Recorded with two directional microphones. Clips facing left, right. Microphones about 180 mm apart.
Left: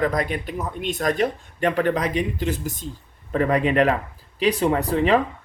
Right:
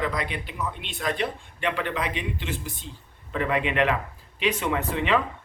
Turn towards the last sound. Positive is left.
turn(degrees=40)  # may be behind; listen again after turning